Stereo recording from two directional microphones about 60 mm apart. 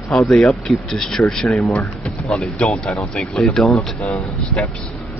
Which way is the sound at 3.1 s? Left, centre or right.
Centre.